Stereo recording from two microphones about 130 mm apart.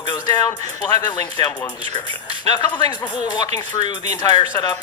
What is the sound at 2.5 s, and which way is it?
Speech, 35° left (ahead or behind).